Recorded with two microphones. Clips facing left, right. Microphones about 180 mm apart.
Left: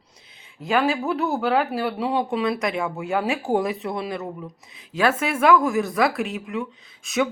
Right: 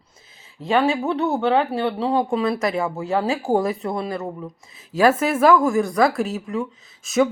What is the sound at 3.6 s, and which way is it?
Speech, centre (ahead or behind).